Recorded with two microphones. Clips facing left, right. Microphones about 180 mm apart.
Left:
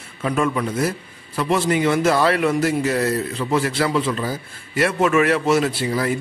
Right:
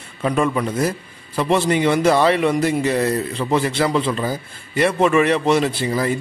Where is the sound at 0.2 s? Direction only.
Centre (ahead or behind).